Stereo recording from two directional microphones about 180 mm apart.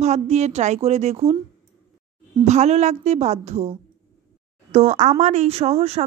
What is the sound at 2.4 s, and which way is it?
Speech, 40° right (ahead or behind).